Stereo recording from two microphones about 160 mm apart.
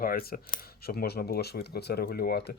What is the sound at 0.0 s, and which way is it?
Speech, 70° left (ahead or behind).